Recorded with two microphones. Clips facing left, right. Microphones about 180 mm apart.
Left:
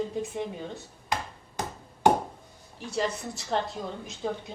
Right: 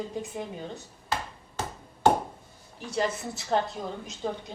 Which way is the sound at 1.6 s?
15° left (ahead or behind).